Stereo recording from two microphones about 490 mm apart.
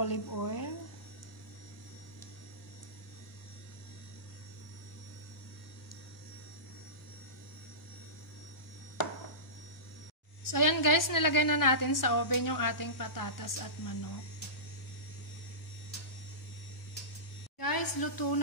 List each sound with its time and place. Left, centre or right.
0.0 s a woman's voice: left
10.4 s a woman's voice: left
17.6 s a sound: left